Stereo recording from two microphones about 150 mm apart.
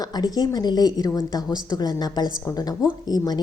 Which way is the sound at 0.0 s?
25° left (ahead or behind).